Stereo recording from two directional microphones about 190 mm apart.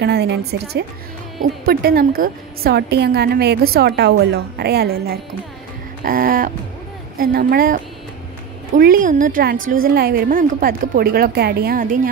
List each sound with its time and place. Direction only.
0.0 s a woman's voice: 60° right (ahead or behind); by 12.1 s 45° right (ahead or behind)